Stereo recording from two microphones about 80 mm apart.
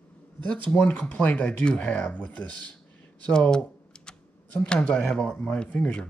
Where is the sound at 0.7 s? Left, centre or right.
Centre.